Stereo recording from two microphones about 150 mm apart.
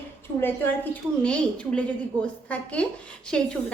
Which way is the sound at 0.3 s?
15° left (ahead or behind).